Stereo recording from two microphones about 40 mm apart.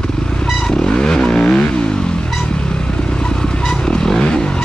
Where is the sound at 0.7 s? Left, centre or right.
Centre.